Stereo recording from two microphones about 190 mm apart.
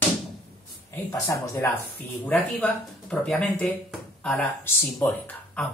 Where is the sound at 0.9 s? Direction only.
15° left (ahead or behind).